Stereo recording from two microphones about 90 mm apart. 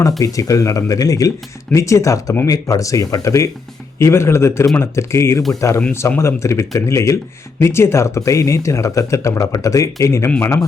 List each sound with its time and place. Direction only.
0.3 s speech: 40° left (ahead or behind)